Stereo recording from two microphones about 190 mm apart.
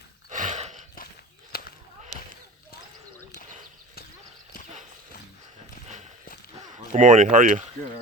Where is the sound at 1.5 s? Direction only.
55° left (ahead or behind).